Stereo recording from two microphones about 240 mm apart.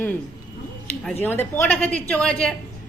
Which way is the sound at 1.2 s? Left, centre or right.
Centre.